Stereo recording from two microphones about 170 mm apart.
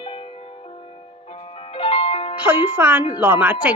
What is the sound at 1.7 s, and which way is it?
Music, 35° left (ahead or behind).